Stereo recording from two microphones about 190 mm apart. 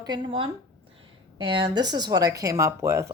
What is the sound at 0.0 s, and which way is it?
Speech, 25° right (ahead or behind).